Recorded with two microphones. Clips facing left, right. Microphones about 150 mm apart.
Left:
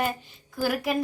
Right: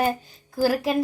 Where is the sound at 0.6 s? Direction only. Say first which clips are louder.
Right 5 dB; 30° right (ahead or behind).